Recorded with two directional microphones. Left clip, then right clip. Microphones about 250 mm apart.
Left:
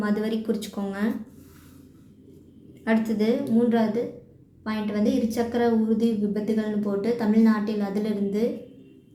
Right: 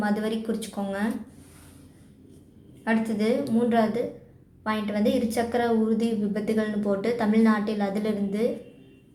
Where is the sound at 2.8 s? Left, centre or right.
Centre.